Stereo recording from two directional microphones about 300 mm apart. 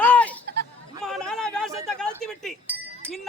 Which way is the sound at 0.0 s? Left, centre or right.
Centre.